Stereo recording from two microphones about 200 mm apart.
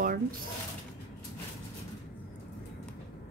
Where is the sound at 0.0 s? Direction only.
45° right (ahead or behind).